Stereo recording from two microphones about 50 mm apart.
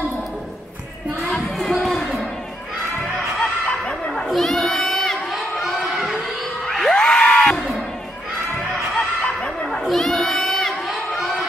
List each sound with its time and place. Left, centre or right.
1.6 s speech: centre
3.6 s a sound: left
4.1 s crowd: centre
5.6 s crowd: centre
6.2 s crowd: centre
7.0 s a sound: left
9.4 s dog: centre
9.8 s crowd: centre